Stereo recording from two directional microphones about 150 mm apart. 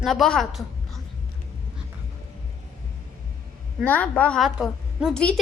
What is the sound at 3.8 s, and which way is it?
A woman's voice, 10° left (ahead or behind).